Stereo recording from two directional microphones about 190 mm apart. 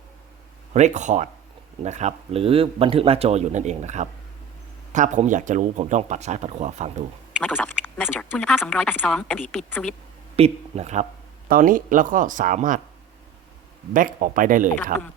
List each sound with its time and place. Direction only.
0.7 s speech: 35° right (ahead or behind)
7.4 s speech: 5° left (ahead or behind)
10.3 s speech: 35° right (ahead or behind)
11.4 s speech: 45° right (ahead or behind)
13.9 s speech: 45° right (ahead or behind)